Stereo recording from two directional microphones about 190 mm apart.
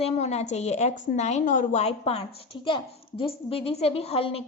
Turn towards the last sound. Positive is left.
turn(degrees=30)  # may be behind; listen again after turning